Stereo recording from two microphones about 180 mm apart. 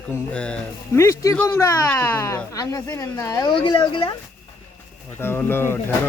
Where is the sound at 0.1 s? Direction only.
5° left (ahead or behind); by 4.1 s 30° left (ahead or behind).